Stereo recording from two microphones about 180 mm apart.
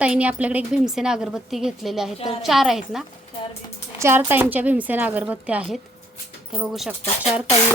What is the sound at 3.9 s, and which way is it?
A woman's voice, 15° right (ahead or behind).